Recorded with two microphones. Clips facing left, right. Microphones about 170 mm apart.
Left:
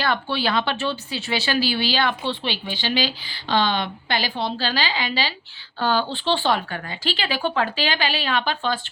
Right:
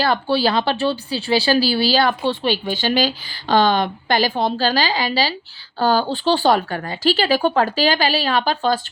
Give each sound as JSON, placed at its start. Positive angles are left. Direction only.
{"t": 0.0, "sound": "speech", "side_deg": -35}